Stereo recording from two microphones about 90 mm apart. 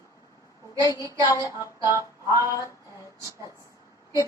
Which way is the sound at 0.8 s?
40° left (ahead or behind).